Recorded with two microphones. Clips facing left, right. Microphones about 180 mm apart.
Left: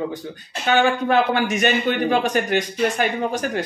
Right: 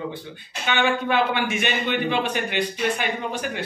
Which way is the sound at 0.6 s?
40° left (ahead or behind).